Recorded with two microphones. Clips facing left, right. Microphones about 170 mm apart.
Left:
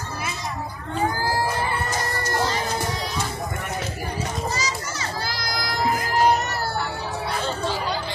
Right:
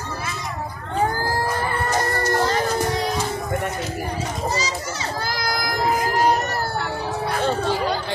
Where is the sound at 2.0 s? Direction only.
50° right (ahead or behind).